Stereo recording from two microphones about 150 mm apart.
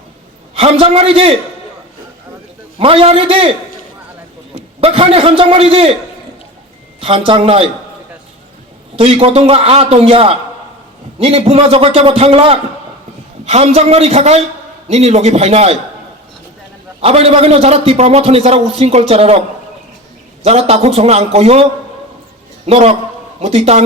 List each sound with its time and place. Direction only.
0.5 s a man's voice: 40° right (ahead or behind)
2.7 s a man's voice: 40° right (ahead or behind)
4.5 s a man's voice: 40° right (ahead or behind)
7.0 s a man's voice: 35° right (ahead or behind)
9.0 s a man's voice: 40° right (ahead or behind)
17.0 s a man's voice: 45° right (ahead or behind)
20.4 s a man's voice: 45° right (ahead or behind)